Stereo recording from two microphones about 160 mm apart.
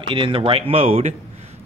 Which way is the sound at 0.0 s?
30° right (ahead or behind).